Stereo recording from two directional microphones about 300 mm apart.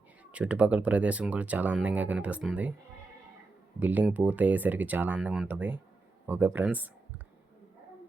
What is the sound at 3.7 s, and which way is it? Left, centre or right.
Speech, centre.